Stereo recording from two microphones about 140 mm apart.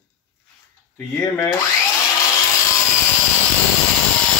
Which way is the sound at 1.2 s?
25° left (ahead or behind).